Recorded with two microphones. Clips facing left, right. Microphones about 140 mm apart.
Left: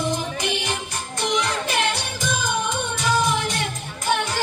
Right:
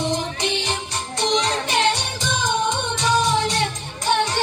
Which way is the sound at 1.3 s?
15° right (ahead or behind).